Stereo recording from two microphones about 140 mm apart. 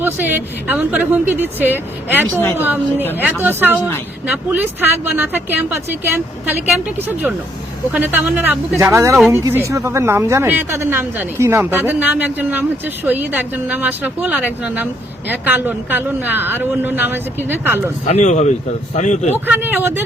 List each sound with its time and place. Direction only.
0.0 s speech: 15° right (ahead or behind)
18.0 s speech: 55° left (ahead or behind)
19.5 s speech: 15° right (ahead or behind)